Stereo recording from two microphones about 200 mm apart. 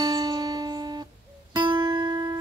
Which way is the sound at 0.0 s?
20° right (ahead or behind).